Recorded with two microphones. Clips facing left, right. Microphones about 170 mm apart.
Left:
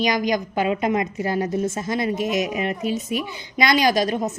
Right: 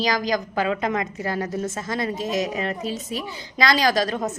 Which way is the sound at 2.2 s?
30° right (ahead or behind).